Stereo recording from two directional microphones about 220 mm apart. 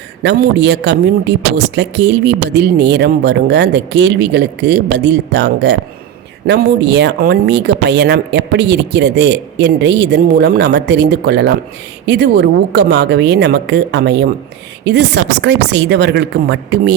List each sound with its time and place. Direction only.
0.2 s a man's voice: 50° right (ahead or behind)